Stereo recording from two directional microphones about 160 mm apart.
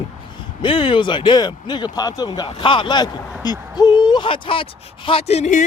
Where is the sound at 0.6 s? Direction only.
30° left (ahead or behind).